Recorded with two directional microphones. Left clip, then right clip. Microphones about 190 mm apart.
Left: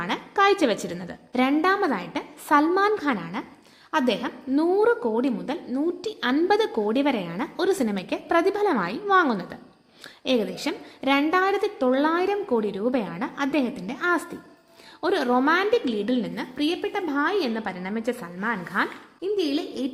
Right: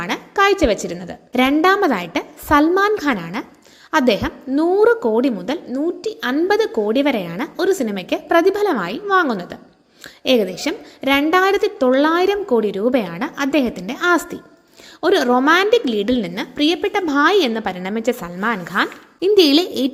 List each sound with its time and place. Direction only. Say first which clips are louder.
0.0 s a woman's voice: right 5 dB; 10° right (ahead or behind)
19.2 s a woman's voice: right 13 dB; 40° right (ahead or behind)